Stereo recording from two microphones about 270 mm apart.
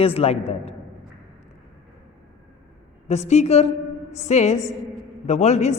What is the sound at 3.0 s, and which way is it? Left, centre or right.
A woman's voice, left.